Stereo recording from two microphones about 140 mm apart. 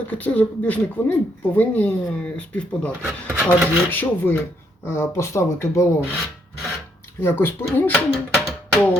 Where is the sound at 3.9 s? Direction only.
15° left (ahead or behind).